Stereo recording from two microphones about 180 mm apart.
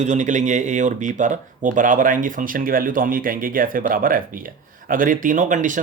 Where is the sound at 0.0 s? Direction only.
40° right (ahead or behind).